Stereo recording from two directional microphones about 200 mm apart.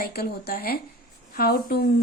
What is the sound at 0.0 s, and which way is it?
Speech, 50° left (ahead or behind).